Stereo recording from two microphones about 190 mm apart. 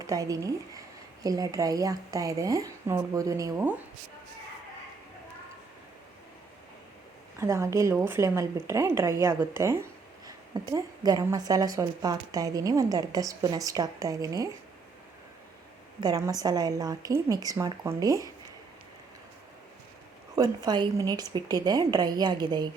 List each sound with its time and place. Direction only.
0.0 s speech: 20° right (ahead or behind)
7.3 s a woman's voice: 15° right (ahead or behind)
16.0 s a woman's voice: 20° right (ahead or behind)
20.3 s a woman's voice: 20° right (ahead or behind)